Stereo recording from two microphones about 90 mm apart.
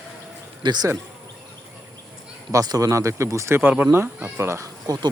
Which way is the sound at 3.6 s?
15° right (ahead or behind).